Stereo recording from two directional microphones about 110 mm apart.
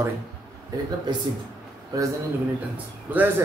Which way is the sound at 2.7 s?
15° right (ahead or behind).